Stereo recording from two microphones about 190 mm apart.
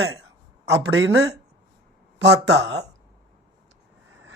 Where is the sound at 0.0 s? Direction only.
90° right.